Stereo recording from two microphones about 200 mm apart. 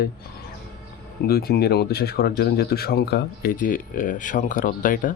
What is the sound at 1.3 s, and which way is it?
Speech, 50° left (ahead or behind).